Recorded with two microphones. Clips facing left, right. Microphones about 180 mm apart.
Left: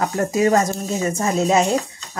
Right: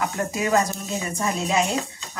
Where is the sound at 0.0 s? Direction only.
40° left (ahead or behind).